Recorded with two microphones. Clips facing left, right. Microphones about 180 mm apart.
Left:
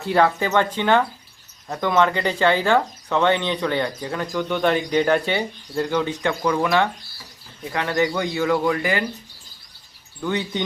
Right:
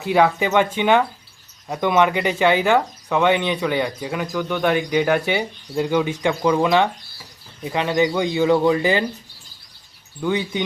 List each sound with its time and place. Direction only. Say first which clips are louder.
0.0 s speech: right 2 dB; 10° right (ahead or behind)
10.2 s speech: right 3 dB; 10° right (ahead or behind)